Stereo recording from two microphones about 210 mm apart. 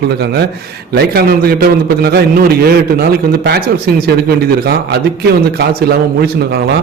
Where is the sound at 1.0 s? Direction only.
45° right (ahead or behind).